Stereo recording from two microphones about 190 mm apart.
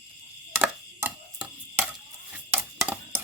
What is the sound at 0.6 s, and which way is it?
Chopping, 5° right (ahead or behind).